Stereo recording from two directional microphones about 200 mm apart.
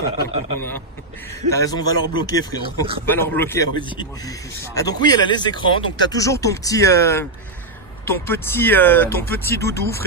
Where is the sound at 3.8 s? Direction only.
20° left (ahead or behind).